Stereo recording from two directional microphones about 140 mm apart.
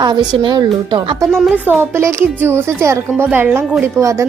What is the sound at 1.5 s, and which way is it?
A woman's voice, 15° right (ahead or behind).